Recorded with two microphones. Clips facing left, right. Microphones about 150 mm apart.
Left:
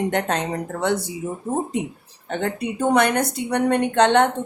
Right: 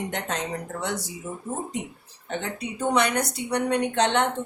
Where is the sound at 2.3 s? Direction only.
55° left (ahead or behind).